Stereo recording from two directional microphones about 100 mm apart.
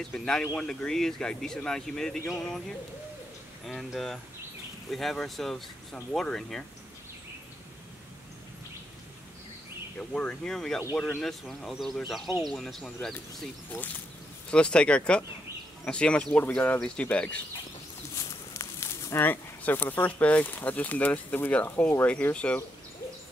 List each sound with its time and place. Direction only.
0.0 s speech: 5° left (ahead or behind)
3.6 s speech: centre (ahead or behind)
9.9 s speech: 10° left (ahead or behind)
14.5 s speech: 10° left (ahead or behind)
18.1 s speech: 30° left (ahead or behind); by 22.6 s 10° left (ahead or behind)